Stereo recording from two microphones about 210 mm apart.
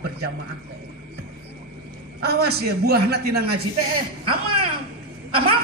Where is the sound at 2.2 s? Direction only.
50° right (ahead or behind).